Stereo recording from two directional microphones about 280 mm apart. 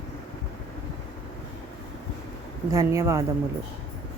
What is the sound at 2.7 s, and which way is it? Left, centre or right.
Speech, centre.